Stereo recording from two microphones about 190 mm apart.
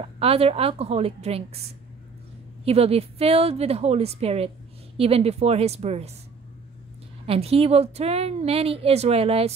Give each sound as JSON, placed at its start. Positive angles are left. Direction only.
{"t": 0.0, "sound": "a woman's voice", "side_deg": -30}
{"t": 2.6, "sound": "a woman's voice", "side_deg": -30}
{"t": 7.2, "sound": "a woman's voice", "side_deg": -30}